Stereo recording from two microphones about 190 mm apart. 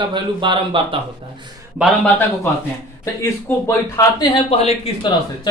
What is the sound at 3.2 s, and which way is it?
Speech, 15° left (ahead or behind).